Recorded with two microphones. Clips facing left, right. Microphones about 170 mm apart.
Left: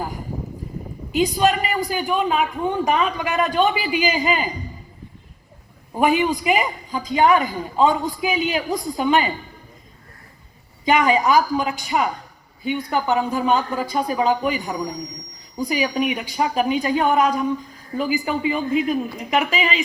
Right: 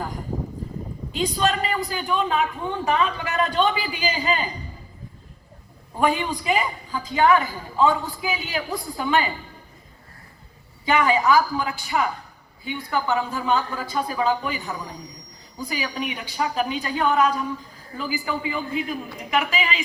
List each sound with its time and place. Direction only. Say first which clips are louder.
1.1 s a man's voice: left 5 dB; 10° left (ahead or behind)
6.0 s a man's voice: left 4 dB; 10° left (ahead or behind)
10.8 s a man's voice: left 2 dB; 15° left (ahead or behind)